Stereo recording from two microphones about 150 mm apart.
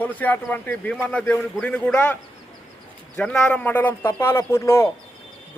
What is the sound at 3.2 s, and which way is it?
Speech, 5° left (ahead or behind).